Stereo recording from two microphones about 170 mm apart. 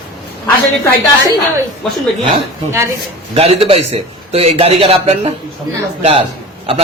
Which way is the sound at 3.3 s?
35° right (ahead or behind).